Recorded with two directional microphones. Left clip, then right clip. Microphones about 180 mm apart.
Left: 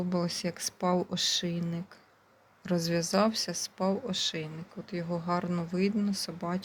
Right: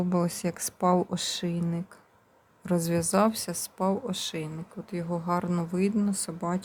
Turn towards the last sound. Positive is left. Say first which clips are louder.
# right 3 dB
turn(degrees=-15)  # may be behind; listen again after turning